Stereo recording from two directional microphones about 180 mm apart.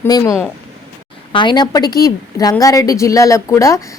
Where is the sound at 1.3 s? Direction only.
25° left (ahead or behind).